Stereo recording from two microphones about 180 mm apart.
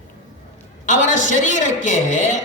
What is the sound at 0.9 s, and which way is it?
A woman's voice, 45° left (ahead or behind).